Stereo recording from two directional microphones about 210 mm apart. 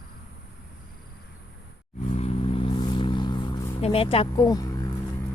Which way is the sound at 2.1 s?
30° left (ahead or behind).